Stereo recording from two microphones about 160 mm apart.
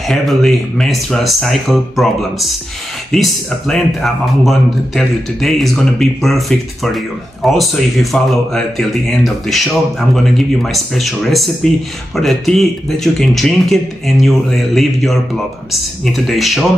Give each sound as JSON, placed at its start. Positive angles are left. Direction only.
{"t": 0.0, "sound": "speech", "side_deg": 0}